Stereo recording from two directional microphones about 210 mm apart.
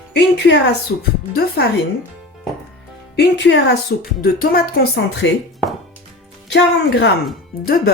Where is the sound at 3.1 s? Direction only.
55° left (ahead or behind).